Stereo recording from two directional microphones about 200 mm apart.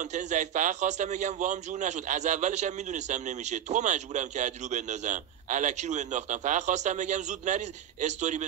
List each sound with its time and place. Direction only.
0.1 s a man's voice: 35° right (ahead or behind)